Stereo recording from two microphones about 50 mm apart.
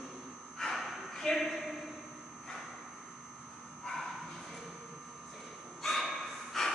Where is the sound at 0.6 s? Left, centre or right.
Centre.